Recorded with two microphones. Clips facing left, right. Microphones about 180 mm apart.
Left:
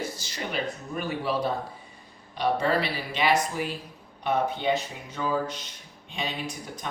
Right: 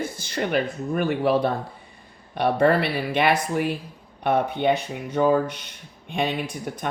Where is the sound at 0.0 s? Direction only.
55° right (ahead or behind).